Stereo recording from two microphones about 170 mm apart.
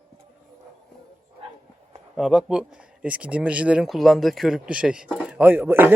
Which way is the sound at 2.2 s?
5° right (ahead or behind).